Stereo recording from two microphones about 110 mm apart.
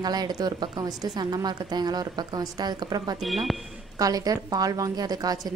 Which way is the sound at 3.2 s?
Centre (ahead or behind).